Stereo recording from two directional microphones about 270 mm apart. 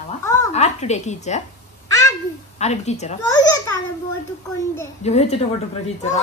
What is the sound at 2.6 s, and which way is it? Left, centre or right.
Speech, left.